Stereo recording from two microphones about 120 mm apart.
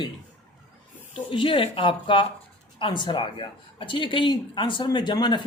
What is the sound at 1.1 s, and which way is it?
Speech, 45° left (ahead or behind).